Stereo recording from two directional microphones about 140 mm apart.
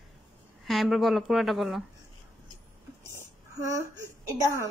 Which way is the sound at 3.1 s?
20° right (ahead or behind).